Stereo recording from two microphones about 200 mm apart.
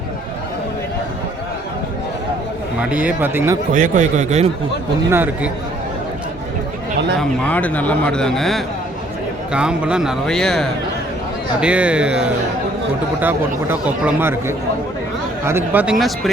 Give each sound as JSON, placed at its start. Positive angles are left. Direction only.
{"t": 2.9, "sound": "speech", "side_deg": -10}
{"t": 3.7, "sound": "a man's voice", "side_deg": -40}
{"t": 5.1, "sound": "speech", "side_deg": -10}
{"t": 7.2, "sound": "speech", "side_deg": 5}